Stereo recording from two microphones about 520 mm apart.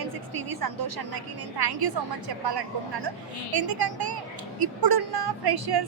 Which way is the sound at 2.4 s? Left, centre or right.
Right.